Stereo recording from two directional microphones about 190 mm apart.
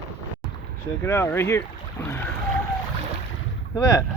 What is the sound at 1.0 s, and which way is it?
Speech, 15° left (ahead or behind).